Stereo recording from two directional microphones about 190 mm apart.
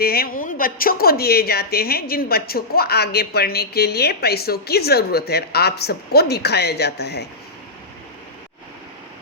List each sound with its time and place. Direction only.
0.0 s speech: 55° left (ahead or behind)